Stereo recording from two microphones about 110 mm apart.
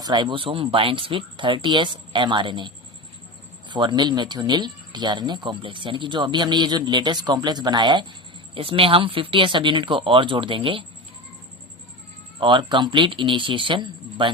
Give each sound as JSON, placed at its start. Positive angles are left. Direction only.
{"t": 0.0, "sound": "speech", "side_deg": -45}
{"t": 8.5, "sound": "speech", "side_deg": -55}
{"t": 12.4, "sound": "speech", "side_deg": -45}